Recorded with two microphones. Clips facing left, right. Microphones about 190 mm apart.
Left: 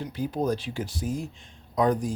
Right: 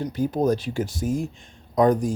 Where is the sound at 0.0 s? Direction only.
45° right (ahead or behind).